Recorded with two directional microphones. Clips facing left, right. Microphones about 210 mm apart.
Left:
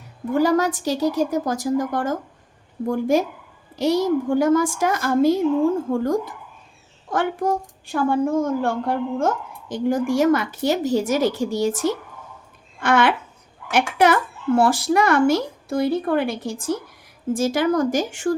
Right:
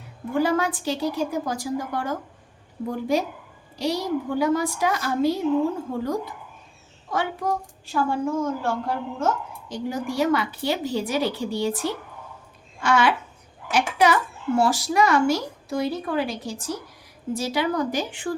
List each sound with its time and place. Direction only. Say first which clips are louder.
0.3 s speech: left 4 dB; 40° left (ahead or behind)
7.9 s speech: left 4 dB; 55° left (ahead or behind)
12.8 s speech: left 2 dB; 55° left (ahead or behind)